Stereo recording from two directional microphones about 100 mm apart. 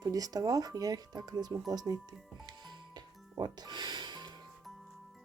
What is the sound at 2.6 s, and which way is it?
Music, 45° right (ahead or behind).